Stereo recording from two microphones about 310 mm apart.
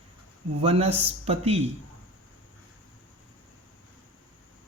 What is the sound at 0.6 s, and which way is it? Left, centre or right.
Speech, centre.